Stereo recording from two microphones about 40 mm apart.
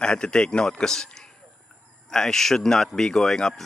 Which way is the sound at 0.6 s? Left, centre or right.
Centre.